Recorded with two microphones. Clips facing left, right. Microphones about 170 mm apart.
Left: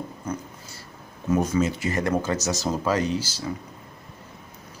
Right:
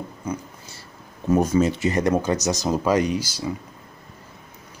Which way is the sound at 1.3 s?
35° right (ahead or behind).